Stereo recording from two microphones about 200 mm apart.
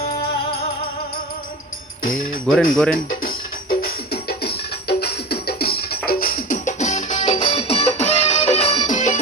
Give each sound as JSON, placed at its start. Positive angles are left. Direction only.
{"t": 2.1, "sound": "music", "side_deg": 5}
{"t": 2.7, "sound": "speech", "side_deg": 5}
{"t": 3.8, "sound": "music", "side_deg": 50}